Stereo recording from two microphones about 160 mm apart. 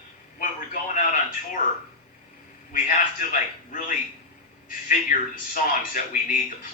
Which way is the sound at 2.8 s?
65° left (ahead or behind).